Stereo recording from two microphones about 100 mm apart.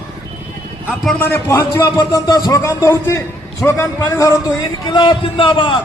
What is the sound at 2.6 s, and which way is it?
A man's voice, 30° left (ahead or behind).